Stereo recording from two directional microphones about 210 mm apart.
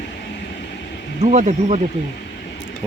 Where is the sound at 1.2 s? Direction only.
35° right (ahead or behind).